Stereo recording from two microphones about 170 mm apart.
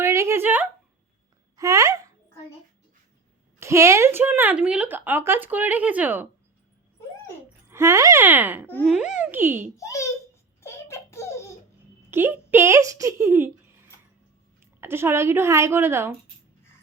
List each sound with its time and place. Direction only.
0.0 s a sound: 15° right (ahead or behind)
1.5 s speech: 20° right (ahead or behind)
3.6 s speech: 15° right (ahead or behind)
7.7 s speech: 15° right (ahead or behind)
9.7 s a child's voice: 20° left (ahead or behind)
10.6 s a sound: 15° left (ahead or behind)
12.1 s speech: 10° right (ahead or behind)
14.6 s a woman's voice: 15° right (ahead or behind)